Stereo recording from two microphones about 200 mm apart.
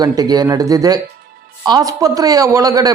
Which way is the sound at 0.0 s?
20° right (ahead or behind).